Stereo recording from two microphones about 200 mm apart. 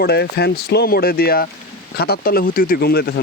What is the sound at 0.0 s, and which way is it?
Speech, 55° left (ahead or behind).